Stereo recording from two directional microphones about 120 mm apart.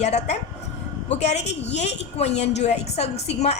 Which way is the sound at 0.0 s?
65° left (ahead or behind).